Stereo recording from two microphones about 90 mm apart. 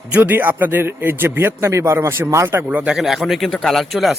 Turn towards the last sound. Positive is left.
turn(degrees=0)  # may be behind; listen again after turning